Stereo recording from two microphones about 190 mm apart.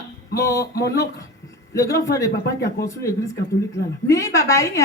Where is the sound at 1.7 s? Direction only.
15° left (ahead or behind).